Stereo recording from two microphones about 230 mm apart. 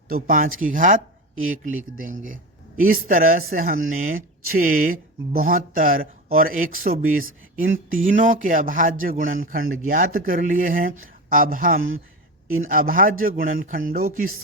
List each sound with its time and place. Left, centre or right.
0.1 s speech: right